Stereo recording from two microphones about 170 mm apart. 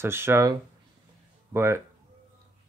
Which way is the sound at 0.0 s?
15° right (ahead or behind).